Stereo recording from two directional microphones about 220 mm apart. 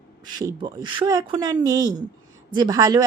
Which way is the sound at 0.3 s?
20° right (ahead or behind).